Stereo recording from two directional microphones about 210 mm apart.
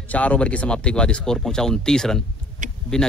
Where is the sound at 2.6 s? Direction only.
35° right (ahead or behind).